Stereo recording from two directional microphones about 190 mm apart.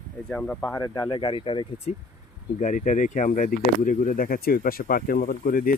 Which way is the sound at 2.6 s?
40° left (ahead or behind).